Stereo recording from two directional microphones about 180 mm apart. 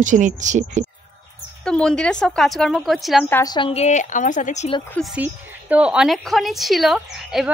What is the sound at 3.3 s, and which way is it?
A woman's voice, 20° left (ahead or behind).